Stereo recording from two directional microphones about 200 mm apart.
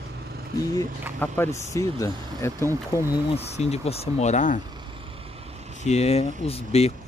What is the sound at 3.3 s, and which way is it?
Speech, 30° left (ahead or behind).